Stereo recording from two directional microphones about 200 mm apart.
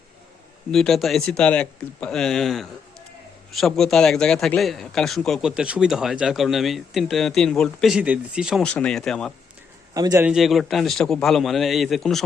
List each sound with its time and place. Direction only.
0.7 s speech: centre (ahead or behind)
9.9 s a man's voice: 15° right (ahead or behind)
10.2 s speech: centre (ahead or behind)